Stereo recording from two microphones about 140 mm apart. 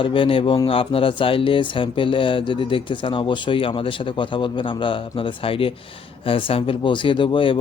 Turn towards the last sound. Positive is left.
turn(degrees=40)  # may be behind; listen again after turning